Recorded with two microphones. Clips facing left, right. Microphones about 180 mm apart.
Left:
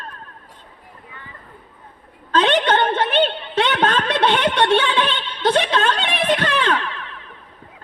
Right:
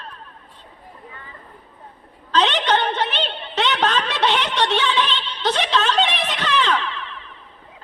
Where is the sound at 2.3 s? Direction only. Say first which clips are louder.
Left 2 dB; 50° left (ahead or behind).